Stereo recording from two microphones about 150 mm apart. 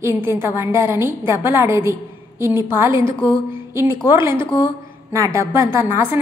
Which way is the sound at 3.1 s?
35° left (ahead or behind).